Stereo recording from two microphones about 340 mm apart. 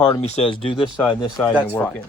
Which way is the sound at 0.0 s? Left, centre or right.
Centre.